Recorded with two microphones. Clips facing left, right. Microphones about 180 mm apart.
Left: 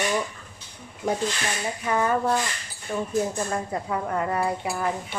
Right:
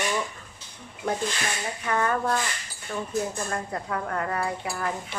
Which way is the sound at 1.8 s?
15° left (ahead or behind).